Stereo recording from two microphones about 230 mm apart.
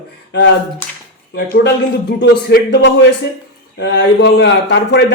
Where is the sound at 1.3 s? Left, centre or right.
Left.